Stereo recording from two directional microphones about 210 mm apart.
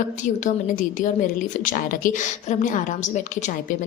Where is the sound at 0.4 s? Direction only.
40° left (ahead or behind).